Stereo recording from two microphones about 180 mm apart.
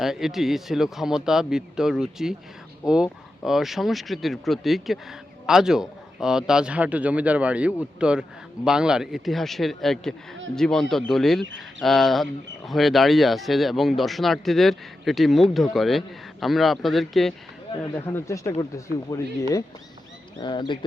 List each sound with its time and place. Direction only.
0.0 s speech: centre (ahead or behind)
17.9 s speech: 15° left (ahead or behind)